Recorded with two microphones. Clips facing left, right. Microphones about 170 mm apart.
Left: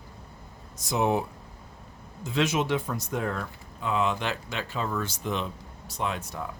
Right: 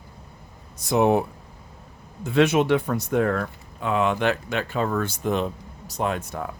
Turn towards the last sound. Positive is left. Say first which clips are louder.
# right 5 dB
turn(degrees=-55)  # may be behind; listen again after turning